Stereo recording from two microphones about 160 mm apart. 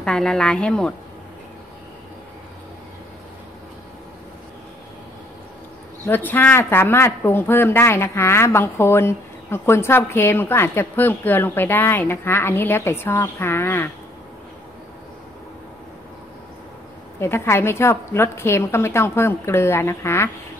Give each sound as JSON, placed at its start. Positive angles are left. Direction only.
{"t": 0.0, "sound": "speech", "side_deg": 5}
{"t": 6.0, "sound": "speech", "side_deg": 10}
{"t": 17.2, "sound": "speech", "side_deg": 15}